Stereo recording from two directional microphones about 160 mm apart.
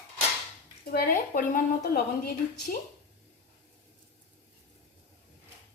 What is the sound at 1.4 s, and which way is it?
Speech, 65° left (ahead or behind).